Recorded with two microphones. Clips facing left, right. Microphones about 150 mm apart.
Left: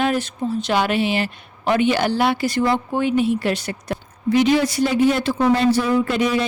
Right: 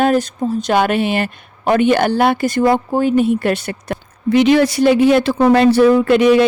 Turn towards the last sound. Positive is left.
turn(degrees=-70)  # may be behind; listen again after turning